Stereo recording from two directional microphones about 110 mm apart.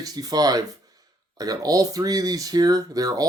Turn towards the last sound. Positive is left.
turn(degrees=-35)  # may be behind; listen again after turning